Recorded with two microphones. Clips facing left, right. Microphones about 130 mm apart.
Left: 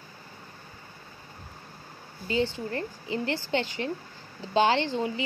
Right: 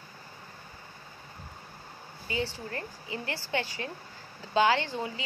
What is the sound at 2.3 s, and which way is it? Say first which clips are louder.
A woman's voice: left 6 dB; 30° left (ahead or behind).